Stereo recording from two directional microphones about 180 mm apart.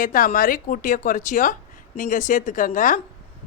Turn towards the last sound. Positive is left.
turn(degrees=45)  # may be behind; listen again after turning